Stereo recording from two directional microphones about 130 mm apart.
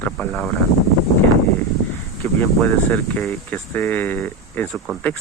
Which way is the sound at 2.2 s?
15° left (ahead or behind).